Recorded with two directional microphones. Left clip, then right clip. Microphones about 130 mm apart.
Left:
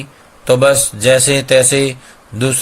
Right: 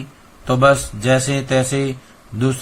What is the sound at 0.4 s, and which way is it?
Speech, 50° left (ahead or behind).